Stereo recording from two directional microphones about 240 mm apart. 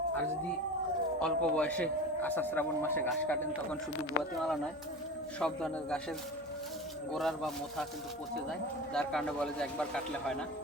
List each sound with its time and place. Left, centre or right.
1.2 s a man's voice: centre
7.1 s a man's voice: centre
8.9 s a man's voice: centre